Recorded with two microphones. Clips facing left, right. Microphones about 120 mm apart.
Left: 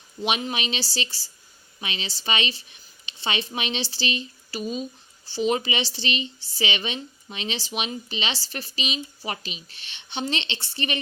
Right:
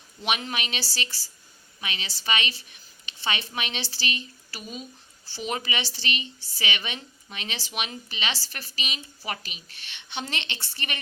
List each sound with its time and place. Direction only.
0.3 s speech: 25° left (ahead or behind)